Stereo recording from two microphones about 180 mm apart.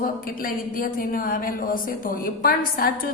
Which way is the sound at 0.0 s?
50° left (ahead or behind).